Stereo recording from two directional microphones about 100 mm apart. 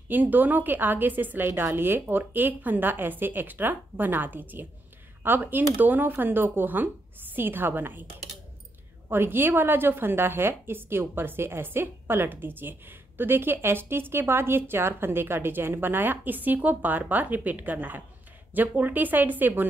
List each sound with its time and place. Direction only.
0.1 s a woman's voice: 15° right (ahead or behind)
9.1 s a woman's voice: 20° right (ahead or behind)